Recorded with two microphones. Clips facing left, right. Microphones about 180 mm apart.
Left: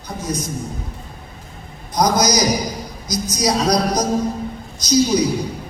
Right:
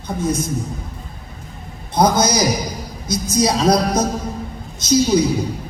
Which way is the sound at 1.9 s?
25° right (ahead or behind).